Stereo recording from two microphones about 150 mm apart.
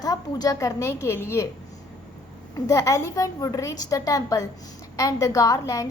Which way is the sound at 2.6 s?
20° left (ahead or behind).